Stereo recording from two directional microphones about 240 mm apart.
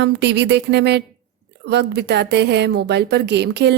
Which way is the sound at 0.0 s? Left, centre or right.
Right.